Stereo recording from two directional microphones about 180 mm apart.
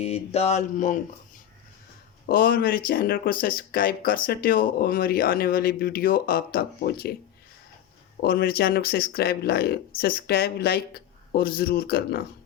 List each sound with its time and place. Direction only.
0.0 s mantra: 35° left (ahead or behind)
2.2 s speech: 55° left (ahead or behind)
8.2 s speech: 60° left (ahead or behind)